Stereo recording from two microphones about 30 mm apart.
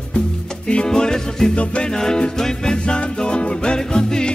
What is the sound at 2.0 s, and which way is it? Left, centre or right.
Music, left.